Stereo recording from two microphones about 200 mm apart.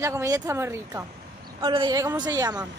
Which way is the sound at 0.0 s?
15° right (ahead or behind).